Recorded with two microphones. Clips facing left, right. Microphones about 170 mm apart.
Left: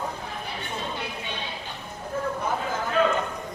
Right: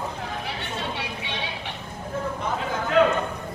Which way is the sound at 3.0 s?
75° right (ahead or behind).